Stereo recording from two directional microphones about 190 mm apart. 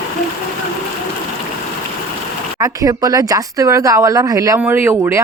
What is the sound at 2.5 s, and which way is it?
Speech, 20° right (ahead or behind).